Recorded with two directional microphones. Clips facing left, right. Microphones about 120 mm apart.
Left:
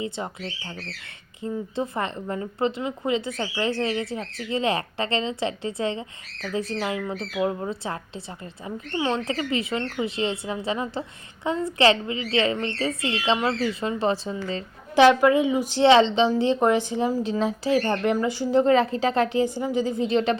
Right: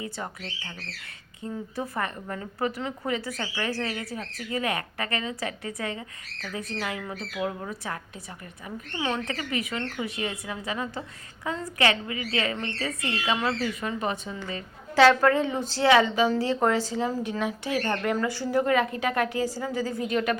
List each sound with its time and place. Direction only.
0.0 s speech: 25° left (ahead or behind)
9.0 s speech: 25° left (ahead or behind)
14.9 s a woman's voice: 15° left (ahead or behind)